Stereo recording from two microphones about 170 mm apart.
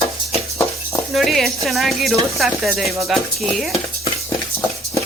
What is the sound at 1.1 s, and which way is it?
Speech, centre (ahead or behind).